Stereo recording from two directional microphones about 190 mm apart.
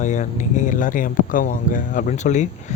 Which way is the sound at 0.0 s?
40° left (ahead or behind).